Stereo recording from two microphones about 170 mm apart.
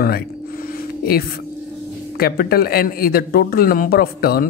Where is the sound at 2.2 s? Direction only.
65° left (ahead or behind).